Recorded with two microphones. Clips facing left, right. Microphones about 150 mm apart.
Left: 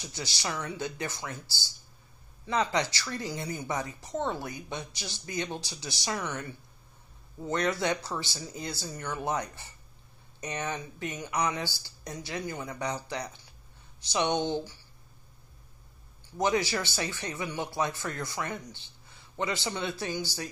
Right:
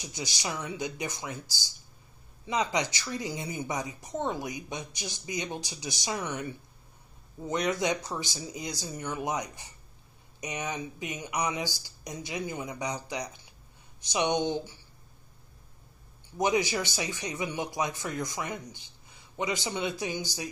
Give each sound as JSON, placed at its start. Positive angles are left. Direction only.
{"t": 0.0, "sound": "speech", "side_deg": -20}
{"t": 16.3, "sound": "speech", "side_deg": -15}